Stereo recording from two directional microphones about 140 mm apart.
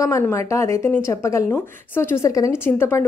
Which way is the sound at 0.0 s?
20° left (ahead or behind).